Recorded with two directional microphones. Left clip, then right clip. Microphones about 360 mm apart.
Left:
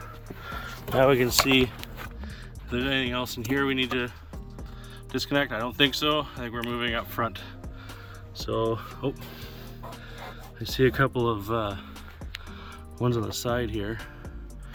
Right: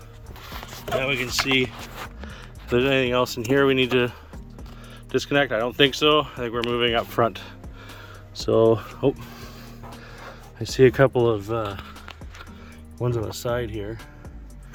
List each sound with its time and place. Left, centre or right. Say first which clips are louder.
1.5 s speech: right 1 dB; centre
2.6 s speech: right 7 dB; centre
5.1 s speech: right 6 dB; centre
10.6 s speech: right 7 dB; centre
13.0 s speech: right 1 dB; centre